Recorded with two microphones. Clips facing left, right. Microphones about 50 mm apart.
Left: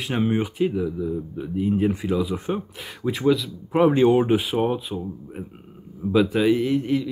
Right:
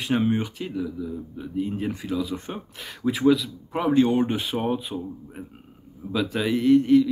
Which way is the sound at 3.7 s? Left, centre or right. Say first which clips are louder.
Left 4 dB; centre.